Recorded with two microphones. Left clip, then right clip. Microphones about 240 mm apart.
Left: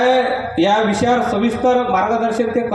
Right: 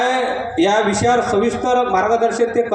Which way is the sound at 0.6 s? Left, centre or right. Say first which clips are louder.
Even; right.